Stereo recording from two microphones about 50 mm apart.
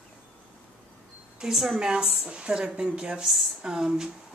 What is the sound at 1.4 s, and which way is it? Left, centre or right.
A woman's voice, centre.